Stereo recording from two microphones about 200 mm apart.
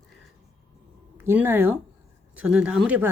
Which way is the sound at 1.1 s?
10° right (ahead or behind).